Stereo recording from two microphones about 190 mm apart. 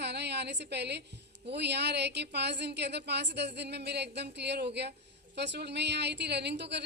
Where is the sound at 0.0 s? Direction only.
60° right (ahead or behind).